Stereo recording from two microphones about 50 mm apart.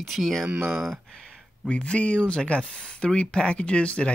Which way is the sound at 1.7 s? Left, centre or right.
Left.